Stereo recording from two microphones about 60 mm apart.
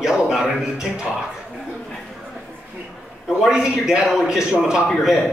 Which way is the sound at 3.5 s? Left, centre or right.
Centre.